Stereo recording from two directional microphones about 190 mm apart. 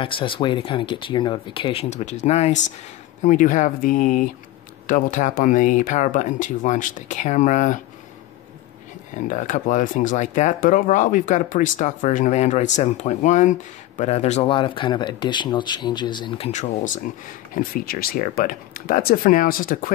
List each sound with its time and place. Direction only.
0.0 s speech: 25° left (ahead or behind)
9.3 s speech: 40° left (ahead or behind)